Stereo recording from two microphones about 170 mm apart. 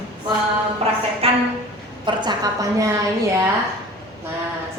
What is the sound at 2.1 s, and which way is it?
A woman's voice, 25° right (ahead or behind).